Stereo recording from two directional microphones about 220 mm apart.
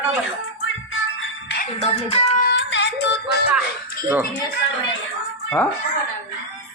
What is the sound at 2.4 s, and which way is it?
Music, 55° left (ahead or behind).